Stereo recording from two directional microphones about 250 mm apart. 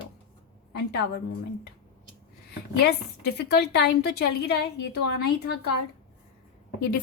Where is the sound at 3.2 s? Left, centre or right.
Left.